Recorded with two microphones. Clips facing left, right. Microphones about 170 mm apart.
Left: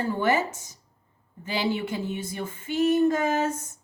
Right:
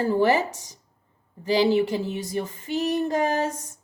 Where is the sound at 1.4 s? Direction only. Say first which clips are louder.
Right 7 dB; 35° right (ahead or behind).